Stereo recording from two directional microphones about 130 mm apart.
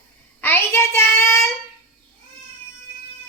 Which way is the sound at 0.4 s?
15° left (ahead or behind).